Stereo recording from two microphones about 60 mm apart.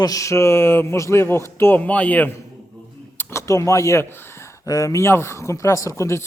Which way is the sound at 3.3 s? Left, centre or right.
Left.